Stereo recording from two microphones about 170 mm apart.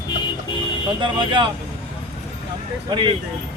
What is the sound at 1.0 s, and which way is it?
Speech, 30° right (ahead or behind).